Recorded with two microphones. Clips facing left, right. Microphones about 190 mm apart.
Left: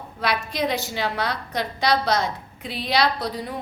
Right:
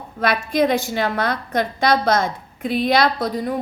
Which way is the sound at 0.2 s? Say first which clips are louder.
Right 6 dB; 50° right (ahead or behind).